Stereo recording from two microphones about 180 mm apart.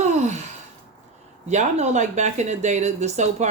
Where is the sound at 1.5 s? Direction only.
40° right (ahead or behind).